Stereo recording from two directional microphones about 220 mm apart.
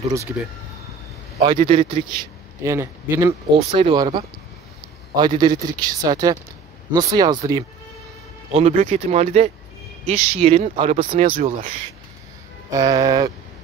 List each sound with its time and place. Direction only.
1.4 s speech: 25° right (ahead or behind)
2.6 s a man's voice: 15° right (ahead or behind)
3.5 s a man's voice: 25° right (ahead or behind)
8.5 s speech: 30° right (ahead or behind)
11.4 s speech: 35° right (ahead or behind)
12.7 s a man's voice: 15° right (ahead or behind)